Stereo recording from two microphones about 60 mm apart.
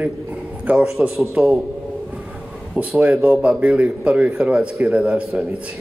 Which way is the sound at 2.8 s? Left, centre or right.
Right.